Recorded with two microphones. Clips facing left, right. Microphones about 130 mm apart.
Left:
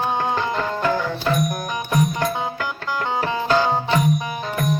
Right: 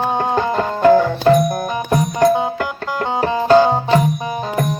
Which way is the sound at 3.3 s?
35° right (ahead or behind).